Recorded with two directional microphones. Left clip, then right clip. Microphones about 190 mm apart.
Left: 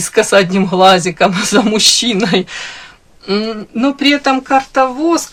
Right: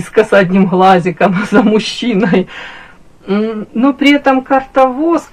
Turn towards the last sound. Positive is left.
turn(degrees=35)  # may be behind; listen again after turning